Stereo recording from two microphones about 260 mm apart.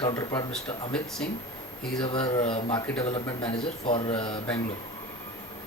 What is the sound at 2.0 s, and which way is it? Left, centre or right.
Speech, centre.